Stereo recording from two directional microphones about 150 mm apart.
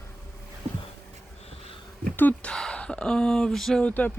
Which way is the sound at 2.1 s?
10° left (ahead or behind).